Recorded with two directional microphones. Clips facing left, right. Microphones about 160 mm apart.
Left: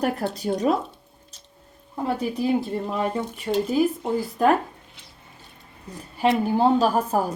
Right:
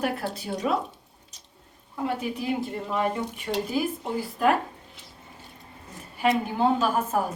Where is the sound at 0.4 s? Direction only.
40° left (ahead or behind).